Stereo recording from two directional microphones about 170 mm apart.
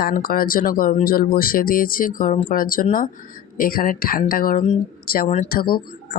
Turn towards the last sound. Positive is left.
turn(degrees=60)  # may be behind; listen again after turning